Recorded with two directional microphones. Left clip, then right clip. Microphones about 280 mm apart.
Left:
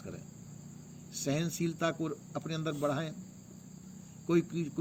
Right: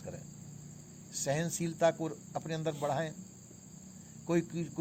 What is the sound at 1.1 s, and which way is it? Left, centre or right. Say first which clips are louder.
Speech: right 1 dB; right.